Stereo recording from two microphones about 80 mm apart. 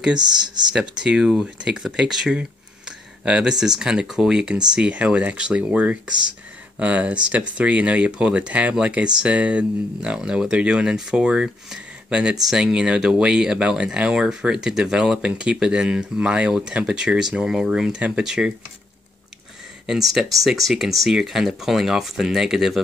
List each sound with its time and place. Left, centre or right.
0.2 s speech: right
0.7 s speech: centre
19.9 s speech: centre